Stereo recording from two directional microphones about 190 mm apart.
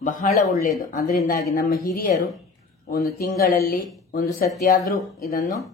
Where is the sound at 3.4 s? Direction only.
50° left (ahead or behind).